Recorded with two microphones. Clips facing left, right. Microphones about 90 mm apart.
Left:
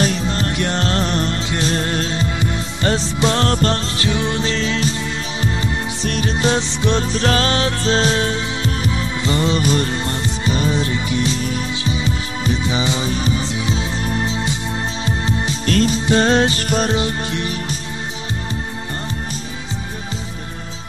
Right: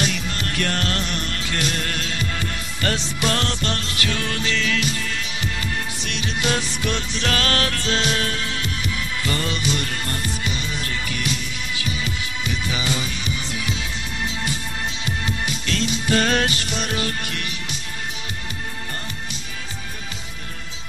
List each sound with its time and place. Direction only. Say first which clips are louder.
0.0 s music: left 6 dB; 30° left (ahead or behind)
3.4 s music: left 8 dB; 40° left (ahead or behind); by 9.6 s 25° left (ahead or behind)
9.6 s music: left 7 dB; 40° left (ahead or behind)
9.8 s music: left 5 dB; 25° left (ahead or behind)
10.5 s music: left 10 dB; 40° left (ahead or behind)
10.8 s music: left 8 dB; 25° left (ahead or behind)
15.7 s music: left 9 dB; 40° left (ahead or behind)
16.1 s music: left 4 dB; 25° left (ahead or behind)
16.5 s music: left 8 dB; 40° left (ahead or behind)
16.9 s music: left 6 dB; 25° left (ahead or behind)